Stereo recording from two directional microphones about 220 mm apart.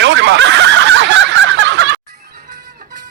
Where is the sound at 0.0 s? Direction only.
50° right (ahead or behind).